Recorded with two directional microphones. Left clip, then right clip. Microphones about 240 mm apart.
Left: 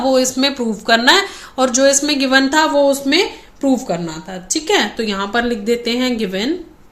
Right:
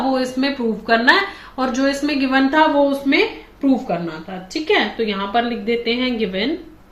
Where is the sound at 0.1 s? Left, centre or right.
Left.